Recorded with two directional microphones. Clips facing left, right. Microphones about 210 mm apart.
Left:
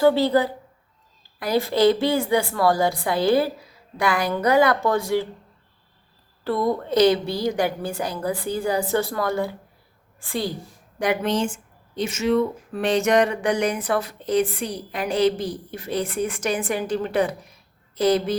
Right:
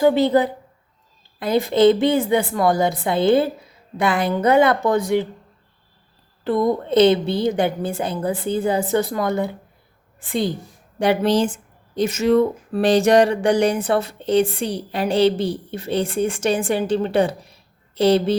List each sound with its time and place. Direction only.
0.0 s speech: 20° right (ahead or behind)
6.4 s speech: 20° right (ahead or behind)